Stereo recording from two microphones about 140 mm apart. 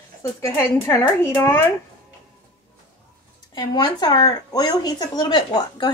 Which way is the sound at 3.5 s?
30° left (ahead or behind).